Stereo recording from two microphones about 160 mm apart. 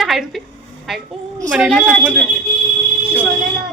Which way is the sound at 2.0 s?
10° right (ahead or behind).